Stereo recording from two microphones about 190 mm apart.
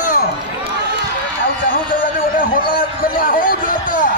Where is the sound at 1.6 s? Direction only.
50° left (ahead or behind).